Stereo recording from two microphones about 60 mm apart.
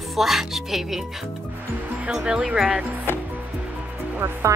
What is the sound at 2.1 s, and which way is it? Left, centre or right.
Speech, centre.